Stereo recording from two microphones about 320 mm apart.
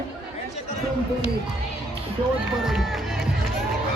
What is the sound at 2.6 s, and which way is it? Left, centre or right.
Music, centre.